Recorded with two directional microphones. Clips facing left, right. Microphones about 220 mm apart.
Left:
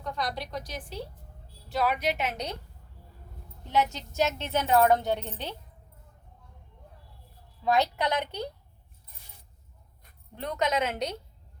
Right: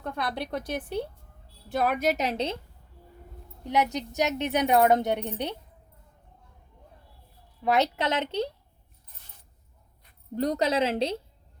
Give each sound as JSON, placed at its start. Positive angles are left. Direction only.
{"t": 0.0, "sound": "a woman's voice", "side_deg": -55}
{"t": 3.6, "sound": "a woman's voice", "side_deg": -15}
{"t": 7.6, "sound": "a woman's voice", "side_deg": -20}
{"t": 10.3, "sound": "a woman's voice", "side_deg": -35}